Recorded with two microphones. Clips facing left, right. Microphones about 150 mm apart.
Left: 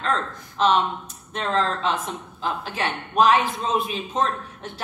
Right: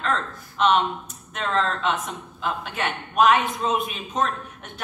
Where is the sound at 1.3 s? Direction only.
30° left (ahead or behind).